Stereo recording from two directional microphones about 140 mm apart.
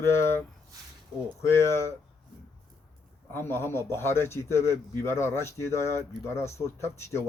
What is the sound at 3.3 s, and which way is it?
A man's voice, 15° left (ahead or behind).